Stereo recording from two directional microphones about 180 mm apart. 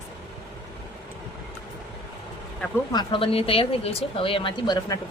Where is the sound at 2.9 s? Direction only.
25° left (ahead or behind).